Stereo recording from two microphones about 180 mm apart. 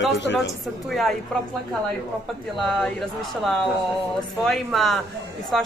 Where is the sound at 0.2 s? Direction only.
80° left.